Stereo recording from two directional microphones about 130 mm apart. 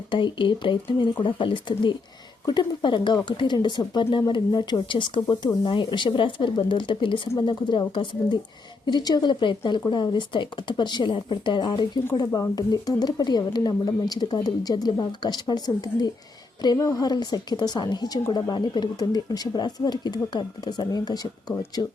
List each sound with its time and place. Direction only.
0.1 s speech: 40° left (ahead or behind)